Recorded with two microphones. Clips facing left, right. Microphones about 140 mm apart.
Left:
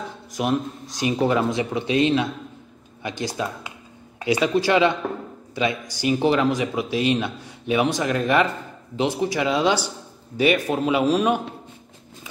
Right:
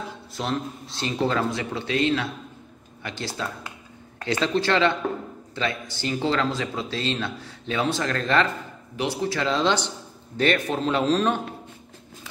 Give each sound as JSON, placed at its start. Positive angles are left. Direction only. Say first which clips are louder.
{"t": 0.3, "sound": "speech", "louder": "left 5 dB", "side_deg": 15}